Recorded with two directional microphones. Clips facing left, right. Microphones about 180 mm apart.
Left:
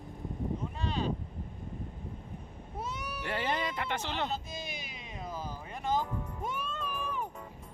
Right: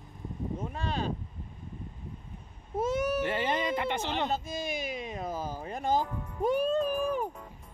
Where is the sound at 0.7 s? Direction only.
45° right (ahead or behind).